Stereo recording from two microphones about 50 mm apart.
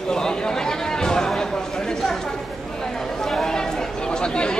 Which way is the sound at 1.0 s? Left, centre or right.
Centre.